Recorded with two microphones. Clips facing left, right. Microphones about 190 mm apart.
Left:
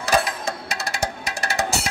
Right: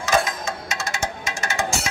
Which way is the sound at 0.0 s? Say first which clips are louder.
Even; 35° left (ahead or behind).